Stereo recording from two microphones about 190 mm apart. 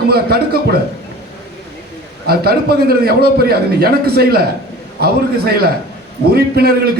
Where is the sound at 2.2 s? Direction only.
55° right (ahead or behind).